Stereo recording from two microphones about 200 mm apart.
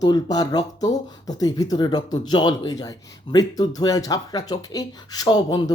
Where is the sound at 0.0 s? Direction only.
20° left (ahead or behind).